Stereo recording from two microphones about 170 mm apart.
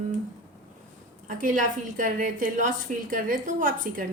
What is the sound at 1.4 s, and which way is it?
A woman's voice, 55° right (ahead or behind).